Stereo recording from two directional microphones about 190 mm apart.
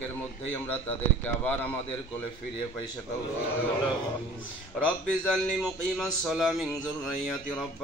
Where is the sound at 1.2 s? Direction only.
10° left (ahead or behind).